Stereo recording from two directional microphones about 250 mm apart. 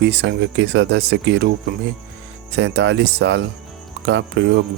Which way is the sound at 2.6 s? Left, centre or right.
Right.